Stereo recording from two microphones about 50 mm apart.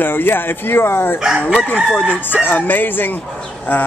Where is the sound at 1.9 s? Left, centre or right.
Left.